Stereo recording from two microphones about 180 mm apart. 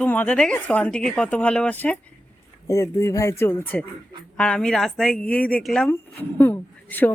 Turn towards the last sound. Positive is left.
turn(degrees=10)  # may be behind; listen again after turning